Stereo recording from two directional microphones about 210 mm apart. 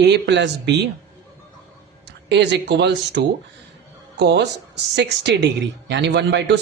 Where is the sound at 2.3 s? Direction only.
55° right (ahead or behind).